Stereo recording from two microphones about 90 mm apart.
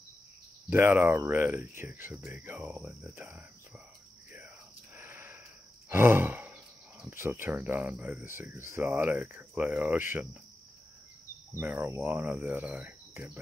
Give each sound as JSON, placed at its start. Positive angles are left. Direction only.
{"t": 0.7, "sound": "speech", "side_deg": -20}
{"t": 4.9, "sound": "sniff", "side_deg": -25}
{"t": 5.9, "sound": "speech", "side_deg": -25}
{"t": 11.6, "sound": "speech", "side_deg": -25}